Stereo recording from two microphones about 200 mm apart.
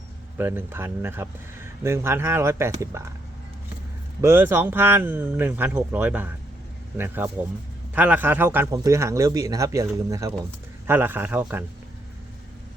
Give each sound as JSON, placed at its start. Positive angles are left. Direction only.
{"t": 0.3, "sound": "speech", "side_deg": -10}
{"t": 4.2, "sound": "speech", "side_deg": -10}